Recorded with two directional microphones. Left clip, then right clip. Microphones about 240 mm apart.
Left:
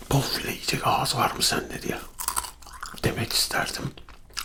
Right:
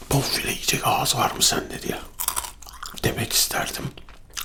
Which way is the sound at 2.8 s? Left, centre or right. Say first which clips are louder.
Right 2 dB; centre.